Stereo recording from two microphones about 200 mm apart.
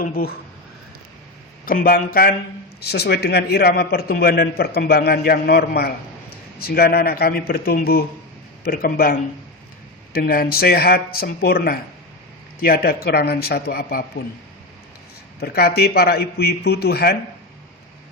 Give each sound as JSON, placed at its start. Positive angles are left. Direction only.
{"t": 0.1, "sound": "a man's voice", "side_deg": 50}
{"t": 1.6, "sound": "a man's voice", "side_deg": 45}
{"t": 15.4, "sound": "a man's voice", "side_deg": 55}